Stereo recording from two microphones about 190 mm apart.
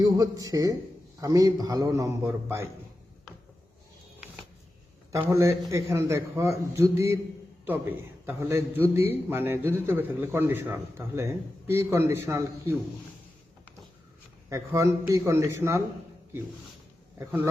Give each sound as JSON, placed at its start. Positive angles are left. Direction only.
{"t": 0.0, "sound": "a man's voice", "side_deg": -20}
{"t": 5.1, "sound": "a man's voice", "side_deg": -15}
{"t": 14.5, "sound": "a man's voice", "side_deg": -15}
{"t": 17.2, "sound": "a man's voice", "side_deg": -15}